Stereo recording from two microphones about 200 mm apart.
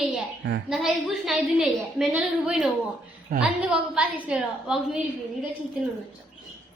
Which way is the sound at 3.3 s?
45° right (ahead or behind).